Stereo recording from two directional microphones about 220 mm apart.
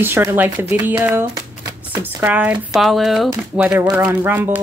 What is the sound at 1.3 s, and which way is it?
Shuffling cards, 10° right (ahead or behind).